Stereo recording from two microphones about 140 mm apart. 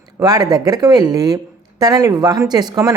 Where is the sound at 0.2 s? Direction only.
25° right (ahead or behind).